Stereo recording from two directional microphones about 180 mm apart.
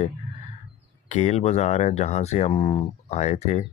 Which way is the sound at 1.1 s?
40° left (ahead or behind).